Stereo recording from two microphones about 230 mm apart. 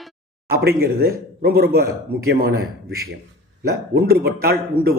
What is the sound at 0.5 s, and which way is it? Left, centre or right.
A man's voice, right.